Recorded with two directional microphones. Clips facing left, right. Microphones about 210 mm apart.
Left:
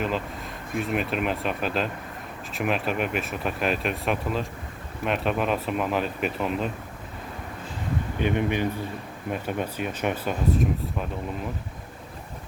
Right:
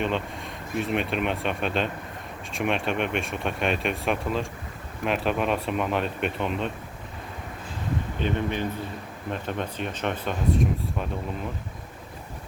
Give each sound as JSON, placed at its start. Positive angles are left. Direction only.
{"t": 0.0, "sound": "speech", "side_deg": 0}
{"t": 8.2, "sound": "speech", "side_deg": 15}